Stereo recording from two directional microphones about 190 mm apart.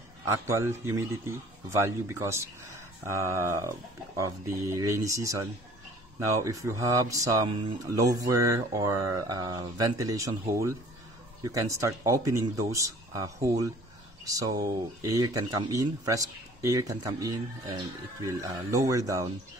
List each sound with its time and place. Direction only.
0.3 s speech: 15° right (ahead or behind)